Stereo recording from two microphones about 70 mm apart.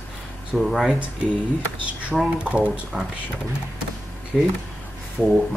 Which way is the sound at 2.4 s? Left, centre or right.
Centre.